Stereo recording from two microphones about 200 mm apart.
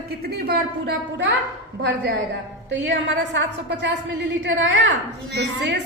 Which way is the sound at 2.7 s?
65° right (ahead or behind).